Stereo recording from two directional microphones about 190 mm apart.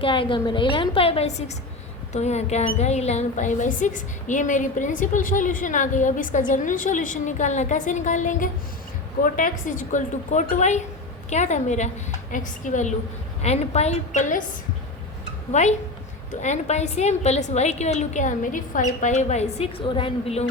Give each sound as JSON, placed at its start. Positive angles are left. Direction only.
{"t": 0.0, "sound": "a woman's voice", "side_deg": 25}
{"t": 15.5, "sound": "a woman's voice", "side_deg": 40}